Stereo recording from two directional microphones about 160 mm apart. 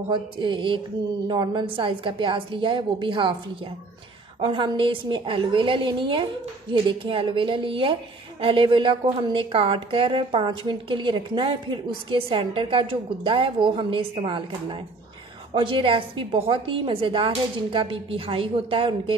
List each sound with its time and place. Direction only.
0.1 s a woman's voice: 30° right (ahead or behind)